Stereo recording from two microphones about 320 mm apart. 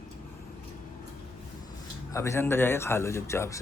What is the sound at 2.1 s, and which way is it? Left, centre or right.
Speech, centre.